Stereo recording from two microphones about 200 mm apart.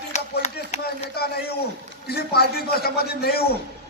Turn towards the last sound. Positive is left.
turn(degrees=50)  # may be behind; listen again after turning